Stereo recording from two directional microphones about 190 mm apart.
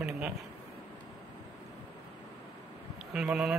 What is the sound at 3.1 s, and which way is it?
Speech, 5° right (ahead or behind).